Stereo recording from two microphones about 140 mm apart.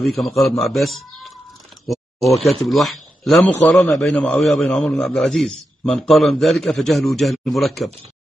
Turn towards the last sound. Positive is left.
turn(degrees=0)  # may be behind; listen again after turning